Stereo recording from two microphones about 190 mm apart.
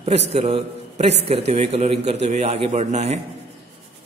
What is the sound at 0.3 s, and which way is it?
A man's voice, 30° right (ahead or behind).